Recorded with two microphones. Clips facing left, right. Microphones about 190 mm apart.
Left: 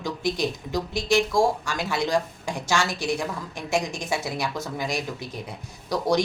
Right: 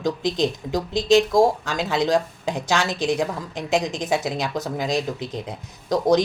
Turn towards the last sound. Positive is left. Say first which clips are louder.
# right 5 dB
turn(degrees=-20)  # may be behind; listen again after turning